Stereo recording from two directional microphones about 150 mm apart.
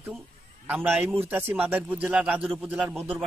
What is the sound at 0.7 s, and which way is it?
A man's voice, 10° right (ahead or behind).